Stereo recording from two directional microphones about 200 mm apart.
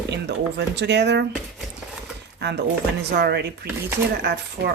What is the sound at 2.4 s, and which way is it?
Speech, 55° right (ahead or behind).